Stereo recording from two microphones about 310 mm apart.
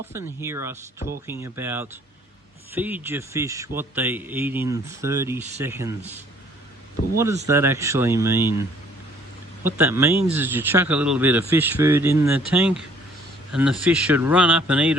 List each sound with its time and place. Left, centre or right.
0.0 s a man's voice: centre
7.4 s a man's voice: centre
9.6 s a man's voice: centre